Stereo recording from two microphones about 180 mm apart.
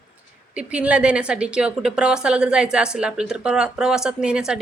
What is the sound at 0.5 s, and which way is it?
A woman's voice, 5° right (ahead or behind).